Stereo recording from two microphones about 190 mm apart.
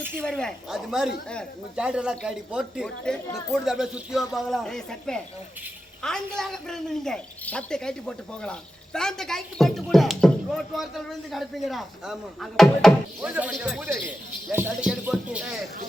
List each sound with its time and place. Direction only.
0.2 s a man's voice: 5° left (ahead or behind)